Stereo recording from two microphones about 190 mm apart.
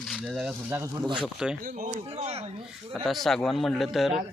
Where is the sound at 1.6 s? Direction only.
40° right (ahead or behind).